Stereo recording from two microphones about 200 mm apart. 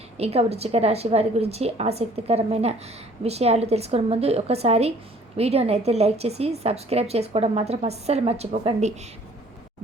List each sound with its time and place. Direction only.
0.2 s a woman's voice: 30° right (ahead or behind)